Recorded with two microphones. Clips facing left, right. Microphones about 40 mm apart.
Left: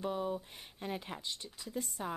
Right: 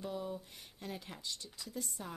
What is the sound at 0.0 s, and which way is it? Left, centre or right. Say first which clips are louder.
Speech: left 5 dB; left.